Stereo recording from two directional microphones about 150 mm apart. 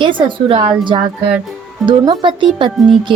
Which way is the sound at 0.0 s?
35° right (ahead or behind).